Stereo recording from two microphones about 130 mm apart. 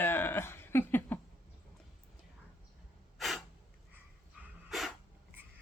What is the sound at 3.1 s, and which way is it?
Sneeze, centre (ahead or behind).